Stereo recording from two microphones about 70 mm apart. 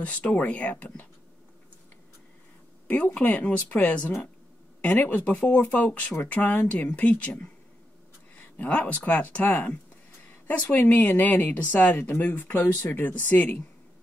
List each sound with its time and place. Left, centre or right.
0.0 s speech: left
3.2 s speech: left